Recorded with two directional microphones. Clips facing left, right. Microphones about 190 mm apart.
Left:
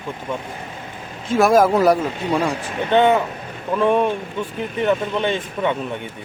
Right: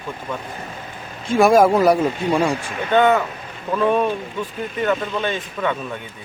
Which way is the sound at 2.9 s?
25° left (ahead or behind).